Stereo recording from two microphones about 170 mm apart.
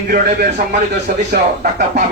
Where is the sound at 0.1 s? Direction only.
45° right (ahead or behind).